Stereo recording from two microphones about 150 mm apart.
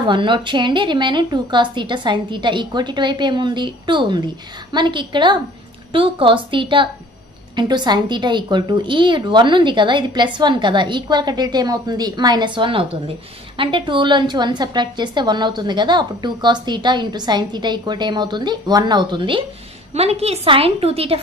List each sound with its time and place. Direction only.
0.0 s a woman's voice: 35° right (ahead or behind)
19.9 s a woman's voice: 45° right (ahead or behind)